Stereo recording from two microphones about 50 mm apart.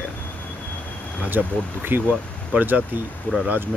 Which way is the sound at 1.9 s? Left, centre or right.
Right.